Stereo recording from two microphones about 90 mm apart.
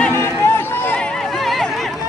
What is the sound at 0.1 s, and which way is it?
Run, 30° left (ahead or behind).